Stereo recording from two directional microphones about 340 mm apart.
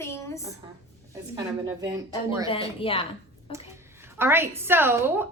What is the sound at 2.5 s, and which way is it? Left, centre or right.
A woman's voice, centre.